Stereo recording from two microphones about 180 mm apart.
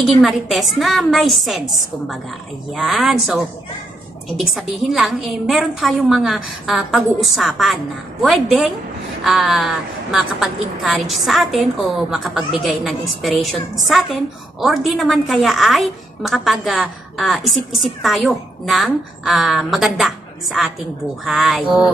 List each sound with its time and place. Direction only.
0.0 s a woman's voice: centre (ahead or behind)
4.4 s a woman's voice: centre (ahead or behind)